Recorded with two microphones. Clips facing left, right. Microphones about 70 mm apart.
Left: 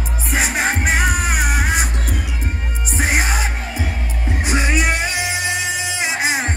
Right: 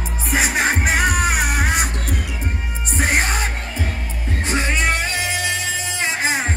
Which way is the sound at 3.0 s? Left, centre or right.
Centre.